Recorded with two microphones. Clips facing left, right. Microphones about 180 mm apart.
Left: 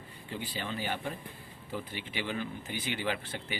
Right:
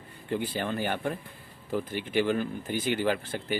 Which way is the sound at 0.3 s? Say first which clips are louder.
Right 8 dB; 50° right (ahead or behind).